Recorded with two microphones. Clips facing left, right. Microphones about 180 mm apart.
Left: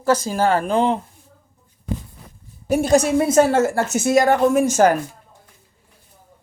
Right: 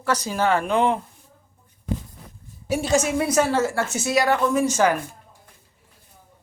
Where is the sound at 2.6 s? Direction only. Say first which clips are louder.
Left 5 dB; 55° left (ahead or behind).